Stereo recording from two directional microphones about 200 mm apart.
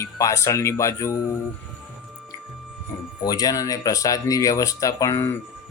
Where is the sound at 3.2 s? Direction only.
20° left (ahead or behind).